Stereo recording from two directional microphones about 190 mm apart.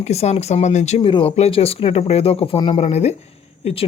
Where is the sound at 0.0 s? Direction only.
35° left (ahead or behind).